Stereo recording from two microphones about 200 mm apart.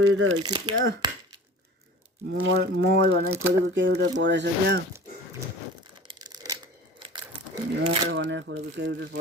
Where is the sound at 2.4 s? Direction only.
60° right (ahead or behind).